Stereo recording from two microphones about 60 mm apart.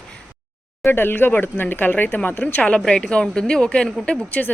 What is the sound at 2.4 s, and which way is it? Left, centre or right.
A woman's voice, centre.